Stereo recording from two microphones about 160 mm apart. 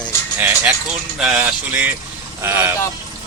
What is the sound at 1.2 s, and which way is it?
Speech, 10° right (ahead or behind).